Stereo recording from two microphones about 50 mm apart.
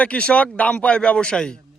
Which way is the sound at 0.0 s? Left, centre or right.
Left.